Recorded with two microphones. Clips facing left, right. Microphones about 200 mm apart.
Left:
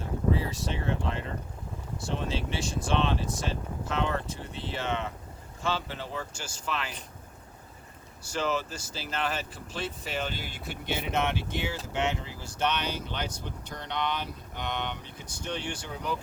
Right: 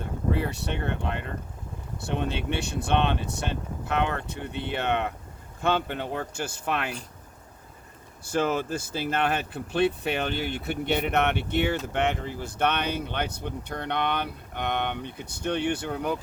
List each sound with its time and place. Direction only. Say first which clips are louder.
0.3 s speech: right 2 dB; 60° right (ahead or behind)
8.2 s speech: right 4 dB; 55° right (ahead or behind)
11.9 s speech: right 4 dB; 55° right (ahead or behind)